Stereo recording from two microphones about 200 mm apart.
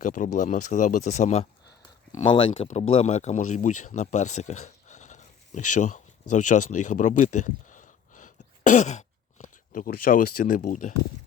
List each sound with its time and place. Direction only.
0.0 s speech: 40° left (ahead or behind)
2.1 s speech: 25° left (ahead or behind); by 10.9 s 40° left (ahead or behind)